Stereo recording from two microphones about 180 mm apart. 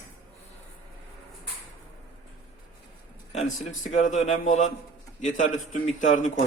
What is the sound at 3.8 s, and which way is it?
Speech, 45° left (ahead or behind).